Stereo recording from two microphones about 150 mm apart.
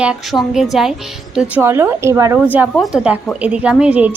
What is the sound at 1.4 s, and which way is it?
A woman's voice, 15° right (ahead or behind).